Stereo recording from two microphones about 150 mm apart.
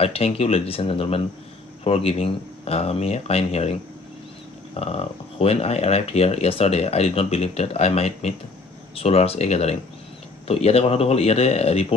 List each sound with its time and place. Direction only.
0.0 s speech: 40° left (ahead or behind)
4.7 s speech: 40° left (ahead or behind)